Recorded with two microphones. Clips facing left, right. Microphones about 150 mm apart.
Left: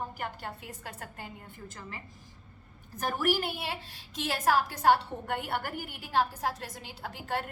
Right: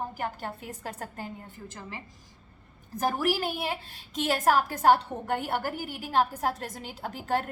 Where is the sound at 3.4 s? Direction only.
45° right (ahead or behind).